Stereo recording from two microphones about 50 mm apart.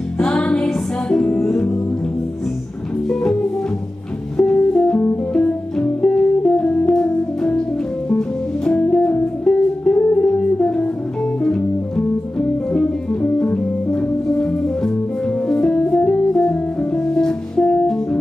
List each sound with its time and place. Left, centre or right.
0.2 s music: centre
3.1 s music: centre
4.4 s music: centre
4.9 s music: left
5.3 s music: centre
12.4 s music: left